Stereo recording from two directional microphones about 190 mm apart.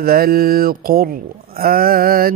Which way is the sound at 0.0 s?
50° right (ahead or behind).